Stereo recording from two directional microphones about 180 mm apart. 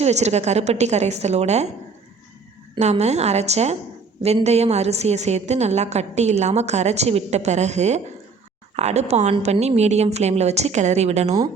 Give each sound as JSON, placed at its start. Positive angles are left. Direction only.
{"t": 0.0, "sound": "a woman's voice", "side_deg": -40}
{"t": 2.7, "sound": "a woman's voice", "side_deg": -40}